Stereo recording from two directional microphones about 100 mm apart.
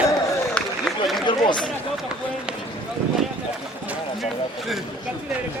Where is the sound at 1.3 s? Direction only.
55° left (ahead or behind).